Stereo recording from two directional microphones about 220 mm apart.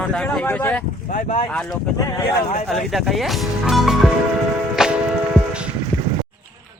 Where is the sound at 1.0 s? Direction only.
35° left (ahead or behind).